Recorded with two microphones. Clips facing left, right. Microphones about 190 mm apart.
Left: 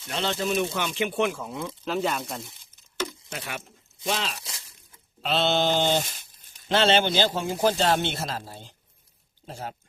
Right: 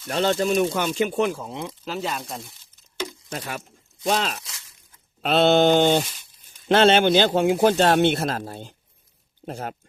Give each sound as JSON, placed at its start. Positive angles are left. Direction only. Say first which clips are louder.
{"t": 0.1, "sound": "speech", "louder": "right 6 dB", "side_deg": -45}
{"t": 1.8, "sound": "speech", "louder": "left 4 dB", "side_deg": 0}
{"t": 3.2, "sound": "speech", "louder": "right 4 dB", "side_deg": -40}